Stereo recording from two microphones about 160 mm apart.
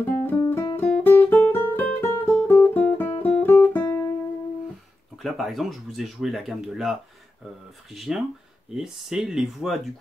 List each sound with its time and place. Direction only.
0.0 s guitar: 10° left (ahead or behind)
0.8 s music: 10° left (ahead or behind)
3.5 s guitar: 15° left (ahead or behind)
5.1 s speech: centre (ahead or behind)